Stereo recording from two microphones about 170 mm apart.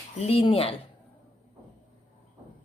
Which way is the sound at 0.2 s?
35° left (ahead or behind).